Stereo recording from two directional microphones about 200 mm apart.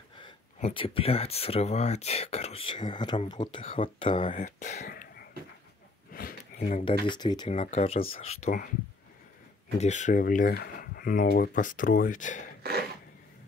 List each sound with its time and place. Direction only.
0.2 s speech: 30° left (ahead or behind)
4.3 s speech: 35° left (ahead or behind)
6.1 s a sound: 45° left (ahead or behind)
7.1 s speech: 20° left (ahead or behind)
7.4 s speech: 35° left (ahead or behind)
9.8 s speech: 35° left (ahead or behind)